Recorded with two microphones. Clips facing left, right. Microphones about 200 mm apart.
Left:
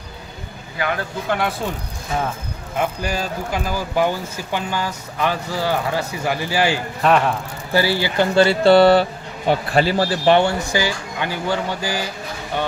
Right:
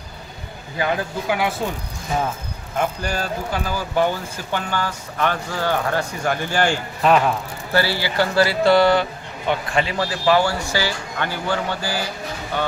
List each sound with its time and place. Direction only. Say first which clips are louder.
0.7 s speech: right 1 dB; 25° right (ahead or behind)
2.8 s speech: left 1 dB; 10° left (ahead or behind)
7.7 s speech: left 2 dB; 15° left (ahead or behind)